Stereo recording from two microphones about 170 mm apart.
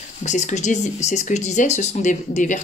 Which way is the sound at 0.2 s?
45° left (ahead or behind).